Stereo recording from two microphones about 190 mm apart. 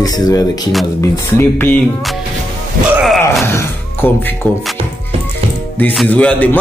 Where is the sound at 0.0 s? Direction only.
20° left (ahead or behind); by 2.1 s 5° left (ahead or behind).